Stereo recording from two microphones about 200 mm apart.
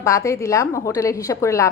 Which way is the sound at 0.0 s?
15° left (ahead or behind).